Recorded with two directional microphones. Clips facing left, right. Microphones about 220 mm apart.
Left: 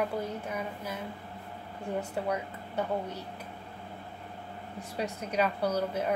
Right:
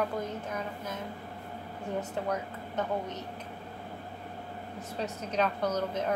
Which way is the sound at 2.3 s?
10° left (ahead or behind).